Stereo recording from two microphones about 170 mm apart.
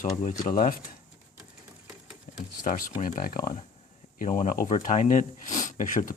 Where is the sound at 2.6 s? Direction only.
55° left (ahead or behind).